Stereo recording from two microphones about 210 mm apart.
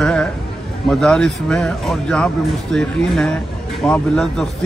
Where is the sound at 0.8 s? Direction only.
Centre (ahead or behind).